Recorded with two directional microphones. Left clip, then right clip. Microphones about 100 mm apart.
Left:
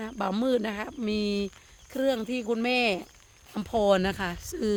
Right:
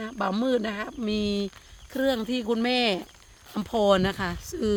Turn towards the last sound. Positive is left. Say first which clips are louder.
# right 2 dB
turn(degrees=5)  # may be behind; listen again after turning